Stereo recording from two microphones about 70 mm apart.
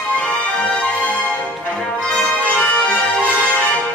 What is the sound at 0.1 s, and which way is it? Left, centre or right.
Music, centre.